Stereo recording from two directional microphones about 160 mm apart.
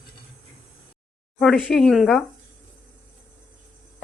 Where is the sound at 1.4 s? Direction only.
5° left (ahead or behind).